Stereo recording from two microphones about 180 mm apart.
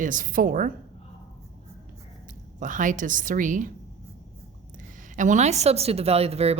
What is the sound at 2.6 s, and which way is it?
A woman's voice, 45° right (ahead or behind).